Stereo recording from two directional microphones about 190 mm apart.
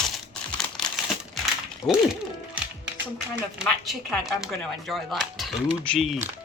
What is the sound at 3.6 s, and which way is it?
Speech, centre (ahead or behind).